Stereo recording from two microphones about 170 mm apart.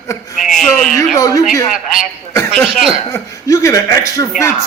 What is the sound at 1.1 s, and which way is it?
Speech, 20° left (ahead or behind).